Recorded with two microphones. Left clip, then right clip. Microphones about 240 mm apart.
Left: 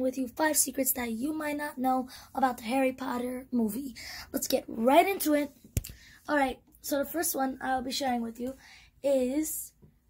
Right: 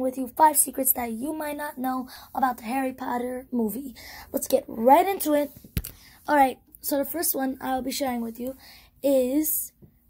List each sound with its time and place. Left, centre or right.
0.0 s speech: centre
1.4 s a woman's voice: centre
5.9 s a woman's voice: right